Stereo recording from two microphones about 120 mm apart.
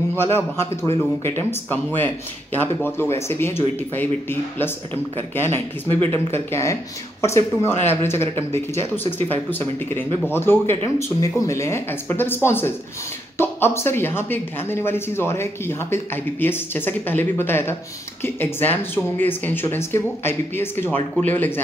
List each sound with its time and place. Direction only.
0.1 s speech: 20° left (ahead or behind)